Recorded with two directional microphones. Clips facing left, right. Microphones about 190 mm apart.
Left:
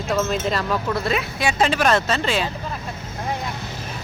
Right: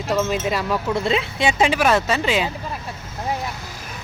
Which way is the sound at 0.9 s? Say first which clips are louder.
Right 2 dB; 25° right (ahead or behind).